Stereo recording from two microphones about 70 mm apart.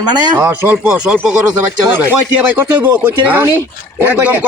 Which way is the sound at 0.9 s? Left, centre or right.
Centre.